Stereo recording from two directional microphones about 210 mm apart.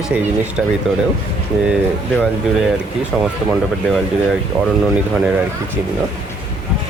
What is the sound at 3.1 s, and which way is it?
Speech, centre (ahead or behind).